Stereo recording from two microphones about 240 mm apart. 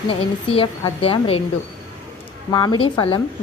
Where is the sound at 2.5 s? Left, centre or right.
Centre.